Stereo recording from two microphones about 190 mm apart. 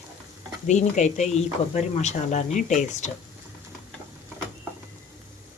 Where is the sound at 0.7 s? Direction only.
40° left (ahead or behind).